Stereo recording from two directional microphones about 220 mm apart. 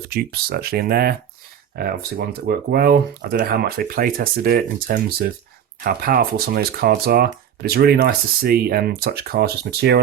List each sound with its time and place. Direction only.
0.1 s speech: 45° right (ahead or behind)